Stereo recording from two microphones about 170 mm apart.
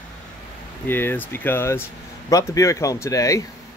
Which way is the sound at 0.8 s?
10° left (ahead or behind).